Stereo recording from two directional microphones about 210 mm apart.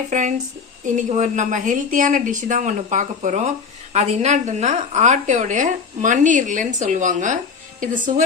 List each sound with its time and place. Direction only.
0.1 s a woman's voice: 35° right (ahead or behind)